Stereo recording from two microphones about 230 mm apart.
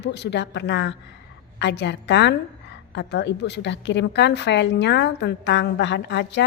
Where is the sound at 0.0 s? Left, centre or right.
Left.